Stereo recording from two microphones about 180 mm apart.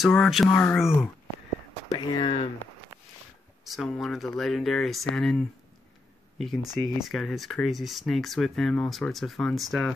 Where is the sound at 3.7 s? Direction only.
Centre (ahead or behind).